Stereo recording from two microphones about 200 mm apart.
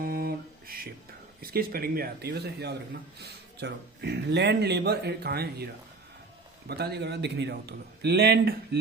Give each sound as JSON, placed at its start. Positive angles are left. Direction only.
{"t": 0.0, "sound": "mantra", "side_deg": -50}
{"t": 1.4, "sound": "a man's voice", "side_deg": -50}
{"t": 6.7, "sound": "a man's voice", "side_deg": -55}